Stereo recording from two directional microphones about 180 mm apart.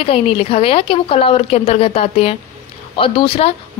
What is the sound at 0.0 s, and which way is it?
A woman's voice, 30° left (ahead or behind).